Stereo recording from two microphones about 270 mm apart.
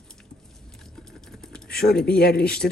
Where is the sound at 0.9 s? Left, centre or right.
Centre.